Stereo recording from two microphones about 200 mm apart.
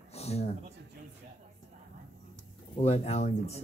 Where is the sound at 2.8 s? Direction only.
30° left (ahead or behind).